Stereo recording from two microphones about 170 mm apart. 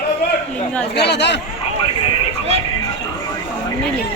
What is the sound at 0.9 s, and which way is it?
Speech, 80° left.